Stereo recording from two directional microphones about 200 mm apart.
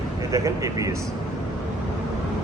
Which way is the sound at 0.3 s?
15° right (ahead or behind).